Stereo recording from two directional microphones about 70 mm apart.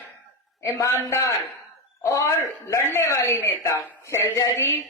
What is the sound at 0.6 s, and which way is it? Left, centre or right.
A man's voice, left.